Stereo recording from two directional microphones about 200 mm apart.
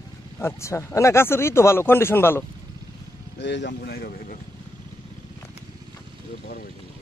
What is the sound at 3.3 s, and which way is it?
Speech, 60° left (ahead or behind).